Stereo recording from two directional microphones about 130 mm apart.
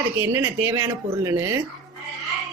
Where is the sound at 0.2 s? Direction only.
20° right (ahead or behind).